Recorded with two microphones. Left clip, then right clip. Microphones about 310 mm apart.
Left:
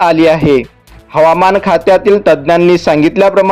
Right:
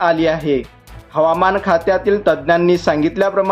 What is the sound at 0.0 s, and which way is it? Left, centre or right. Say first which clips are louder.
A man's voice: left 7 dB; left.